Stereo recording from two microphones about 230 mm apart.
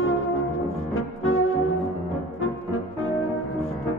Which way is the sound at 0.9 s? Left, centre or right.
Left.